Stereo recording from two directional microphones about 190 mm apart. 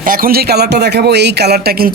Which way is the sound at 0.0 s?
50° right (ahead or behind).